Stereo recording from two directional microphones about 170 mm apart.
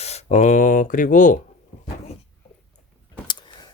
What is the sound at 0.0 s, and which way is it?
Speech, 40° left (ahead or behind).